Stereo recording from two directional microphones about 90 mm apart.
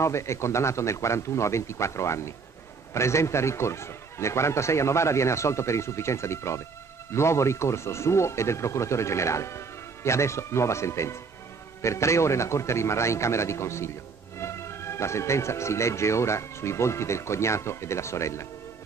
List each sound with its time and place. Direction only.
0.0 s speech: 30° left (ahead or behind)